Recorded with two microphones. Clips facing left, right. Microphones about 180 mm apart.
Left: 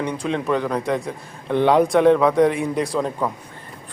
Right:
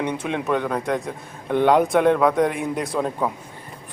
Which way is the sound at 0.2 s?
5° right (ahead or behind).